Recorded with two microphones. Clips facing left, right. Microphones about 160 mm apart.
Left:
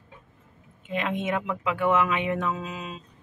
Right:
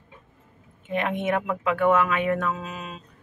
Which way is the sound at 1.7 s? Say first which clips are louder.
Right 3 dB; 20° left (ahead or behind).